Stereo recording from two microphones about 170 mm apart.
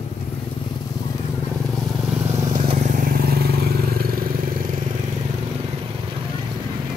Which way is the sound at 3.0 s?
65° right (ahead or behind).